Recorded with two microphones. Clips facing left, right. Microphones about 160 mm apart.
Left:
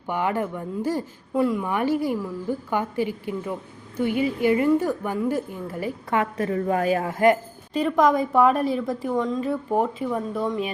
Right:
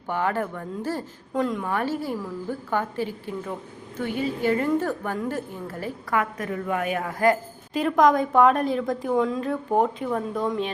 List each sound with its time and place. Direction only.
0.1 s a woman's voice: 15° left (ahead or behind)
6.1 s a woman's voice: 30° left (ahead or behind)
7.7 s a woman's voice: centre (ahead or behind)